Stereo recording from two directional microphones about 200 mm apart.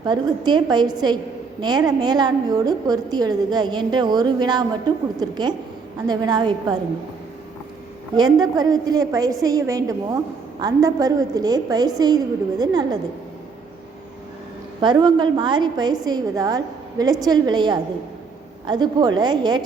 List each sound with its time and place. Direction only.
0.0 s a woman's voice: 20° right (ahead or behind)
8.1 s a woman's voice: 20° right (ahead or behind)
14.8 s a woman's voice: 20° right (ahead or behind)